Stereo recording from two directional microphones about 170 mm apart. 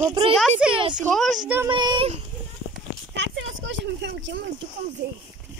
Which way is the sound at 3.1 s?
90° right.